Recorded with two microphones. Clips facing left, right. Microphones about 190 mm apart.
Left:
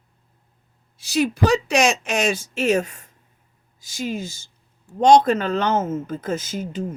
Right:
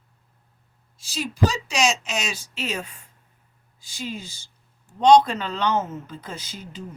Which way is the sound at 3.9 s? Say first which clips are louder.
Left 6 dB; 45° left (ahead or behind).